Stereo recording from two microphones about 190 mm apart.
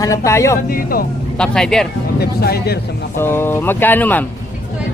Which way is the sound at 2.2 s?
55° left (ahead or behind).